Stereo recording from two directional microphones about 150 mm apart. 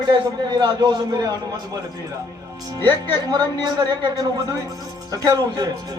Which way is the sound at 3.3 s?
30° right (ahead or behind).